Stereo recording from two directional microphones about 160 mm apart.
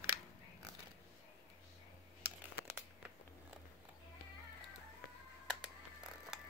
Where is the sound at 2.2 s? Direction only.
15° right (ahead or behind).